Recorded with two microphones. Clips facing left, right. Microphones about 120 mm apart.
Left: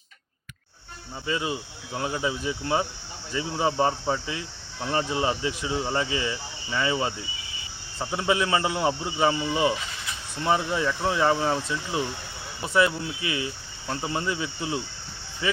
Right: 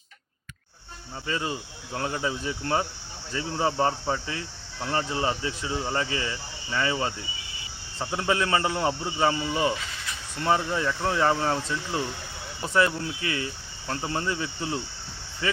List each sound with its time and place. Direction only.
1.3 s speech: 10° left (ahead or behind)